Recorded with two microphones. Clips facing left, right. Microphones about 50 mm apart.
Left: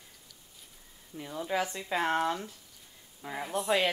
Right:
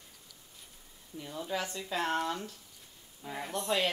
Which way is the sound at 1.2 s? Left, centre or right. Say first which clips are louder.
Left 4 dB; centre.